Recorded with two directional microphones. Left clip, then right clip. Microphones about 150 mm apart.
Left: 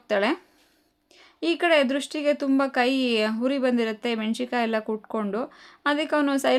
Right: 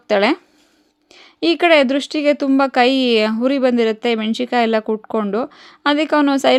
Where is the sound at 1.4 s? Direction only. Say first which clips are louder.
Right 8 dB; 40° right (ahead or behind).